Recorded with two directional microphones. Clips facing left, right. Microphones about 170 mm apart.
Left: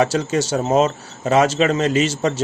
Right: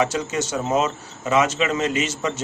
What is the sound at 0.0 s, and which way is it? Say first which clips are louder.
Speech: left 4 dB; 35° left (ahead or behind).